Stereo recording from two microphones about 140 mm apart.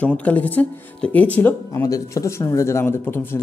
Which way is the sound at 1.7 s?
25° left (ahead or behind).